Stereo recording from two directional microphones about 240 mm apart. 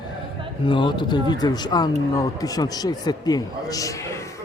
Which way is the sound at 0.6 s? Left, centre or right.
Centre.